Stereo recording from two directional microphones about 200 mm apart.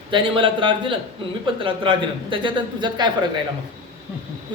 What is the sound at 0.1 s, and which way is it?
Speech, 25° right (ahead or behind).